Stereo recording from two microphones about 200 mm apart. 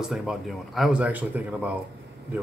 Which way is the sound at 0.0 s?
Centre (ahead or behind).